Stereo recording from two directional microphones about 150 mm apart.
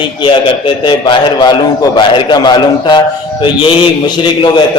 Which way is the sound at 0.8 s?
30° left (ahead or behind).